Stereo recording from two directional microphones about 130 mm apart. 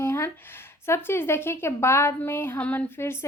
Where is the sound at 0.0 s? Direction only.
20° left (ahead or behind).